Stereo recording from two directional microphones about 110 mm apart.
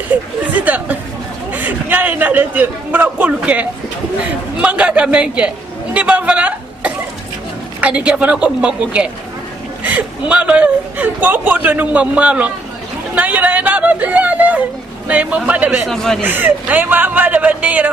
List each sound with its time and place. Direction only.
0.1 s a woman's voice: 15° right (ahead or behind)
15.9 s a man's voice: 5° left (ahead or behind)
16.2 s speech: 20° right (ahead or behind)